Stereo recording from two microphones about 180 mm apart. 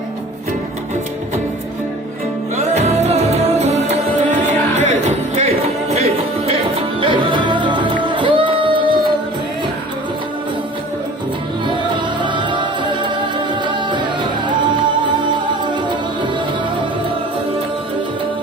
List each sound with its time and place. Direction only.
2.6 s music: 35° right (ahead or behind)
12.2 s music: 25° right (ahead or behind)